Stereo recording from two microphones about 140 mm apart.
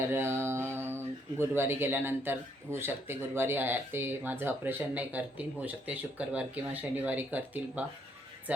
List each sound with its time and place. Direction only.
0.1 s a man's voice: 20° right (ahead or behind)